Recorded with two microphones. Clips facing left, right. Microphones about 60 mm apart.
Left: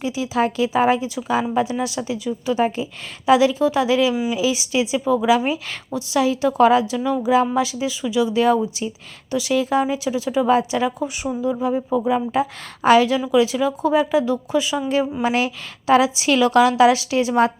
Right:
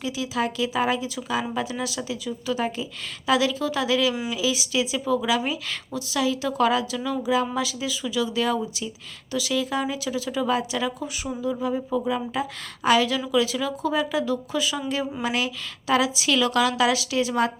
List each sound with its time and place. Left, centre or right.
0.0 s a woman's voice: left